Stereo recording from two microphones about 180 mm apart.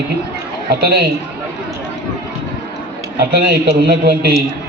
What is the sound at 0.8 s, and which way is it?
Speech, 65° right (ahead or behind).